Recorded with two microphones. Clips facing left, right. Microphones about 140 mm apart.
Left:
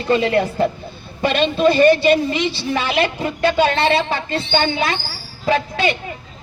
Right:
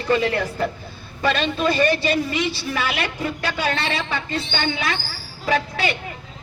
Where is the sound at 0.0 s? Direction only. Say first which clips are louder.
Left 4 dB; 25° left (ahead or behind).